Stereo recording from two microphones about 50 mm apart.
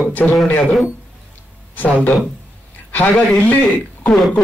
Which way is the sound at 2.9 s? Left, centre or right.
Left.